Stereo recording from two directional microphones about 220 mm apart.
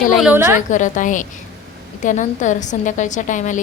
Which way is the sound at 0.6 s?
35° left (ahead or behind).